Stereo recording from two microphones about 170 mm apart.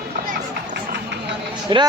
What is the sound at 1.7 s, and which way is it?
Speech, 25° right (ahead or behind).